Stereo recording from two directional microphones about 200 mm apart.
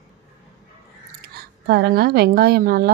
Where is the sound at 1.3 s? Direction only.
55° right (ahead or behind).